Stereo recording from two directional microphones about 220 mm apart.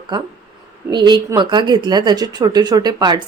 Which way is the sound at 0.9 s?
20° right (ahead or behind).